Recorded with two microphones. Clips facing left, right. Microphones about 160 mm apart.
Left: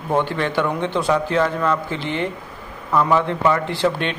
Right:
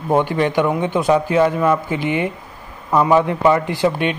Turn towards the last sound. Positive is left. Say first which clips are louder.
# right 3 dB
turn(degrees=-10)  # may be behind; listen again after turning